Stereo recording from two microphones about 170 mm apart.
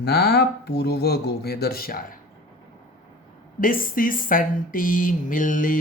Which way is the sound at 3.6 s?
55° left (ahead or behind).